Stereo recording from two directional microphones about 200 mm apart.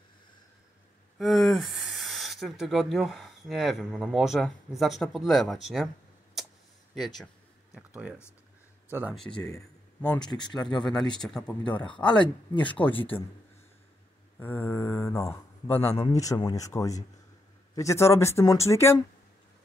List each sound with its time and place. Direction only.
1.1 s speech: centre (ahead or behind)
7.7 s speech: 5° right (ahead or behind)
9.3 s speech: 20° left (ahead or behind)
10.5 s speech: 5° left (ahead or behind)
12.9 s speech: 25° left (ahead or behind)
14.4 s speech: 10° left (ahead or behind)